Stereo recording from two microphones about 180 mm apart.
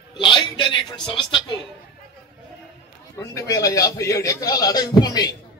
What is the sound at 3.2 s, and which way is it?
A man's voice, 15° left (ahead or behind).